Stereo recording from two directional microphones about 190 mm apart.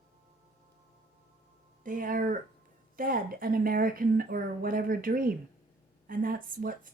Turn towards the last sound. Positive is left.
turn(degrees=-45)  # may be behind; listen again after turning